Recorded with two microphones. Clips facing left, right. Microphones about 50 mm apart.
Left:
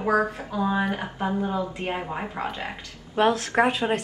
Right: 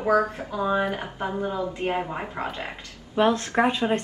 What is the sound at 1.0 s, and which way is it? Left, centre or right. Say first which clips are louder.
Speech: left 2 dB; centre.